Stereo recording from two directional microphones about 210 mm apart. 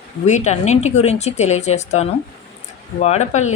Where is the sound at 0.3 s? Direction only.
35° left (ahead or behind).